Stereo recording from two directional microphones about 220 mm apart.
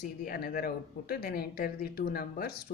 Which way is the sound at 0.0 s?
40° left (ahead or behind).